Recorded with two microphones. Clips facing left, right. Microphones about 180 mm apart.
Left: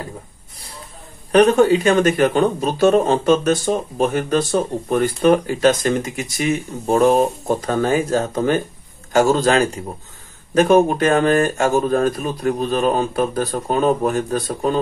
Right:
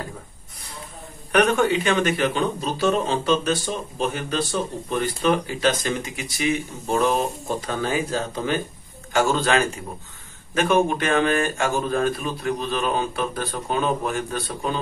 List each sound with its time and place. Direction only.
1.3 s a man's voice: 35° left (ahead or behind)